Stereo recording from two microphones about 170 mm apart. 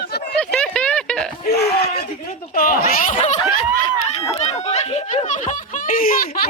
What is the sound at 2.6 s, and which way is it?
Speech, 55° left (ahead or behind).